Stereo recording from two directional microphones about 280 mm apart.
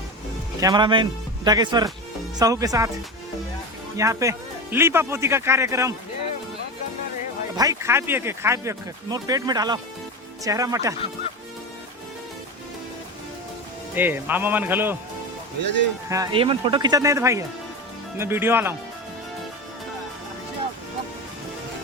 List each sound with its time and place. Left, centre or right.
0.6 s speech: centre
3.9 s speech: centre
7.5 s speech: centre
13.9 s speech: centre
16.0 s speech: centre